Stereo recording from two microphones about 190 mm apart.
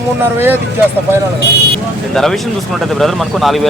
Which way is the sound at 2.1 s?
Centre (ahead or behind).